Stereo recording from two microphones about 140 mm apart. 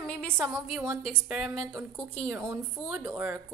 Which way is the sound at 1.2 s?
10° right (ahead or behind).